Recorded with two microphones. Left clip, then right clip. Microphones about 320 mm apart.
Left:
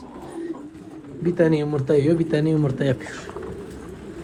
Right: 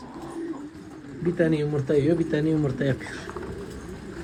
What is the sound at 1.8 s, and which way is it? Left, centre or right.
A man's voice, left.